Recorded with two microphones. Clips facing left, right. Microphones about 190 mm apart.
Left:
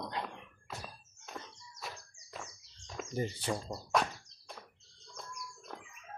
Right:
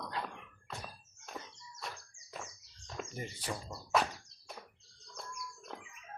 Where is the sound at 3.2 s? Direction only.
30° left (ahead or behind).